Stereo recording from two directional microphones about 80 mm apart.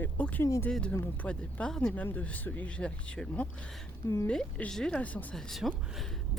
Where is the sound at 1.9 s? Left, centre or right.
Centre.